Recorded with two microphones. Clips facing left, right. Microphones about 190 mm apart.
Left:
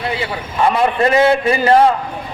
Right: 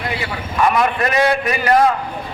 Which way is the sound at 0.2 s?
30° left (ahead or behind).